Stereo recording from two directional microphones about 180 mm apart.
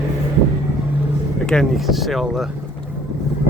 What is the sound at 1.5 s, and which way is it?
Speech, centre (ahead or behind).